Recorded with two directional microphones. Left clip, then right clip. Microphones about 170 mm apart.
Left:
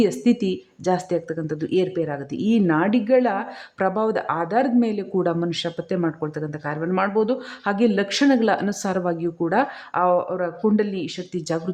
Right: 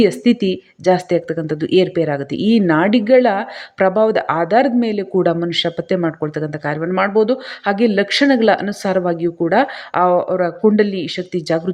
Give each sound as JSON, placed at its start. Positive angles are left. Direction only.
{"t": 0.0, "sound": "speech", "side_deg": -15}